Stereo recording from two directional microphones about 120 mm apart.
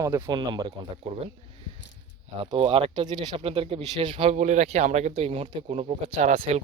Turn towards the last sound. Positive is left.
turn(degrees=-60)  # may be behind; listen again after turning